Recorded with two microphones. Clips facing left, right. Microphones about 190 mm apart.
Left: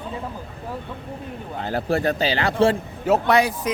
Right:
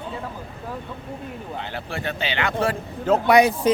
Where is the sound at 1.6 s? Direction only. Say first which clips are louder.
Left 11 dB; 40° left (ahead or behind).